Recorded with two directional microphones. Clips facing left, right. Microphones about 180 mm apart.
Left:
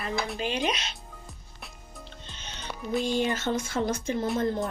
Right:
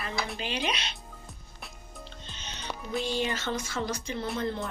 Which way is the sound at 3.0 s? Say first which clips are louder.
Left 4 dB; 50° left (ahead or behind).